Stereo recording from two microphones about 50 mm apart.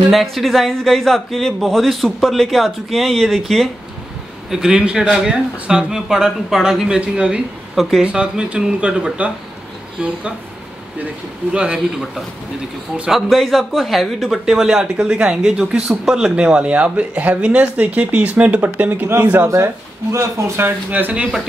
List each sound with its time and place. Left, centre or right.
0.1 s speech: centre
4.5 s speech: centre
11.5 s speech: centre
13.1 s speech: centre; by 18.6 s right
18.6 s speech: right
19.5 s speech: right
20.6 s speech: right